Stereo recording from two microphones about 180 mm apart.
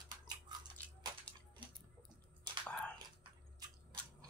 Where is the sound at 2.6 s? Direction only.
5° left (ahead or behind).